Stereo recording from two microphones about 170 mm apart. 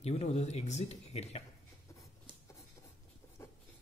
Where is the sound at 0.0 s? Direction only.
40° left (ahead or behind).